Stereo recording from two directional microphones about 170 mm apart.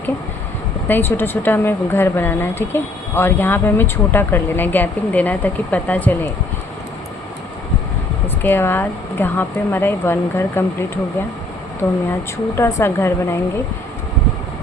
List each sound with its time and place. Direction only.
0.9 s speech: 10° left (ahead or behind)
8.4 s speech: 10° left (ahead or behind)
12.5 s speech: 15° left (ahead or behind)